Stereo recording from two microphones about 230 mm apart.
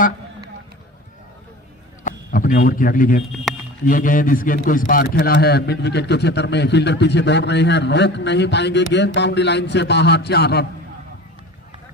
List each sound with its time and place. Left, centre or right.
2.0 s a man's voice: left
3.5 s a sound: centre
3.8 s a man's voice: left